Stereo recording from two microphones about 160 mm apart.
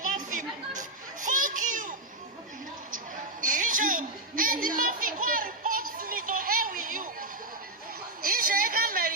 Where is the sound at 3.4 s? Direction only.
55° right (ahead or behind).